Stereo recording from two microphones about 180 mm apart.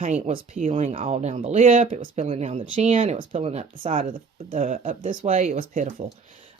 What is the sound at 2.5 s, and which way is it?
Speech, 45° right (ahead or behind).